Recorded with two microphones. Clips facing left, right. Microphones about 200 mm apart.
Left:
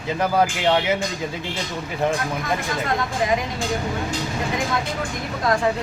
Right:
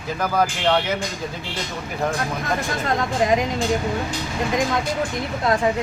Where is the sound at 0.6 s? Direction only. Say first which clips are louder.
Left 1 dB; 10° left (ahead or behind).